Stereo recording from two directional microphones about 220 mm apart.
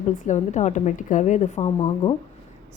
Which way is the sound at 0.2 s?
35° left (ahead or behind).